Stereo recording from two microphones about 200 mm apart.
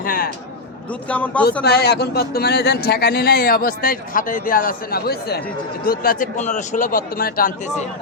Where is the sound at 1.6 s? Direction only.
55° left (ahead or behind).